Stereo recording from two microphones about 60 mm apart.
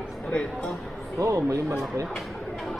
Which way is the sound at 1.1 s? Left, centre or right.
Right.